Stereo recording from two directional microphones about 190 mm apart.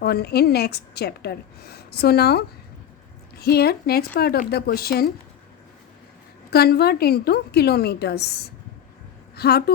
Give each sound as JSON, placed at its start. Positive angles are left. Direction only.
{"t": 0.0, "sound": "a woman's voice", "side_deg": 55}
{"t": 6.5, "sound": "a woman's voice", "side_deg": 55}